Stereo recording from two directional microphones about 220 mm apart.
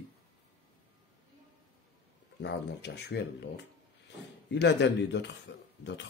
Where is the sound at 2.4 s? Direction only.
50° left (ahead or behind).